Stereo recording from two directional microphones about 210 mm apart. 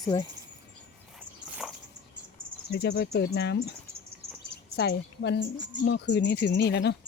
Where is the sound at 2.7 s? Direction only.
50° left (ahead or behind).